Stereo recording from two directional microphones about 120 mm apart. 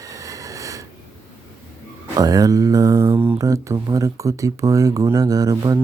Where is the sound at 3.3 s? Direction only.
30° right (ahead or behind).